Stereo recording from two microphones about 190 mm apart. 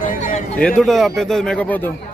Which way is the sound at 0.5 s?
5° left (ahead or behind).